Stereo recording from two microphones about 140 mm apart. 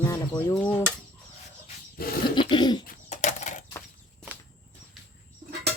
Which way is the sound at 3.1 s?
60° left (ahead or behind).